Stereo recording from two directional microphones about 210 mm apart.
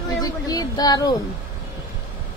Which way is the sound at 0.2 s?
20° left (ahead or behind).